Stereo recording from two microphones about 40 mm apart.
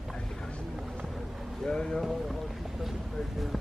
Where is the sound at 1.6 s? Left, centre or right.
Left.